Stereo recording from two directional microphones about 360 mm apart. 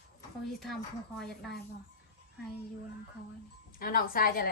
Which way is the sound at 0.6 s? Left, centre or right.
Centre.